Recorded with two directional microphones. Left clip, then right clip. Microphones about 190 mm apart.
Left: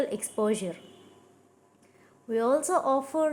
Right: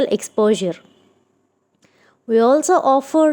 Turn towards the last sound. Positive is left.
turn(degrees=-40)  # may be behind; listen again after turning